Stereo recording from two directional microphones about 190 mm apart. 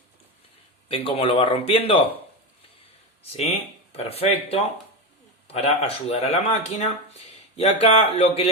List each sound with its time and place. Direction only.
0.9 s speech: 30° left (ahead or behind)
3.3 s speech: 30° left (ahead or behind)